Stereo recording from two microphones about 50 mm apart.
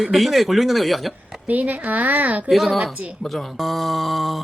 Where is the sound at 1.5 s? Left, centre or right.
Right.